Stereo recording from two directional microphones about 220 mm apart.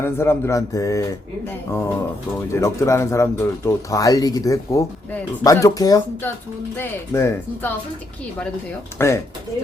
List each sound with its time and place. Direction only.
0.0 s speech: 10° left (ahead or behind)
2.3 s speech: 15° left (ahead or behind)
9.0 s speech: 10° left (ahead or behind)